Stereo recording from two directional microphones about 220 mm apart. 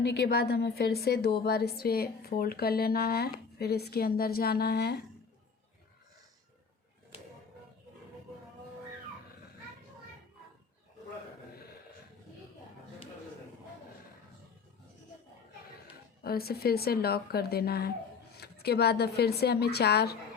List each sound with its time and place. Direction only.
0.1 s speech: 45° left (ahead or behind)
16.2 s speech: 45° left (ahead or behind)